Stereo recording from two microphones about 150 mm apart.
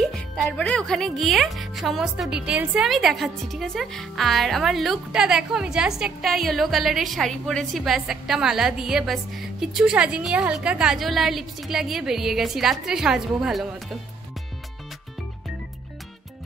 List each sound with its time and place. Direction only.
0.0 s music: centre (ahead or behind)
0.5 s a woman's voice: 5° left (ahead or behind)